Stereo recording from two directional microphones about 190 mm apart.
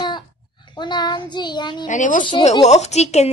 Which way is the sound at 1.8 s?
40° left (ahead or behind).